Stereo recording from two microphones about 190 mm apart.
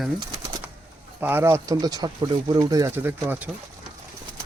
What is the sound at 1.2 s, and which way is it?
Speech, 10° right (ahead or behind).